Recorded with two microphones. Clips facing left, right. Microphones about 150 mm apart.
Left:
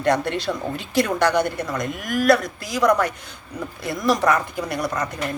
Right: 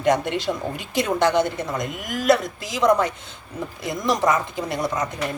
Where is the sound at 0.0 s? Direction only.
15° right (ahead or behind).